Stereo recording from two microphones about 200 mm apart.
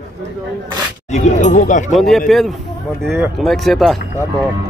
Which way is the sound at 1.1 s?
35° left (ahead or behind).